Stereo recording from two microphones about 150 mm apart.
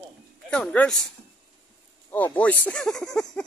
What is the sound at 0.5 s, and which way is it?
Speech, 5° left (ahead or behind).